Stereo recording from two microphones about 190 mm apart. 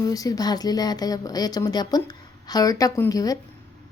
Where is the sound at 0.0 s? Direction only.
20° left (ahead or behind).